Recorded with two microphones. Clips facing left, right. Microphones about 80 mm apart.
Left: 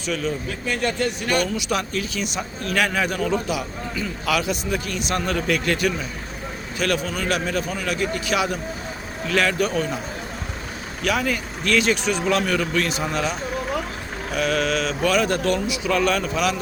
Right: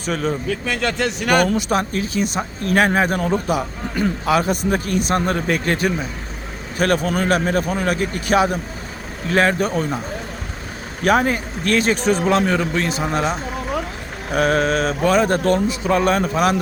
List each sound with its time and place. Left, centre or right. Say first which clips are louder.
0.0 s speech: right 3 dB; right
0.7 s a man's voice: even; right
1.5 s speech: right 5 dB; right
11.0 s speech: right 6 dB; right
14.3 s speech: right 5 dB; right